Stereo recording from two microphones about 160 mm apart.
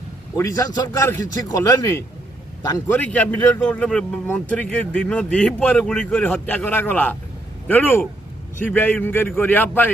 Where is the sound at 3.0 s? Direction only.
10° left (ahead or behind).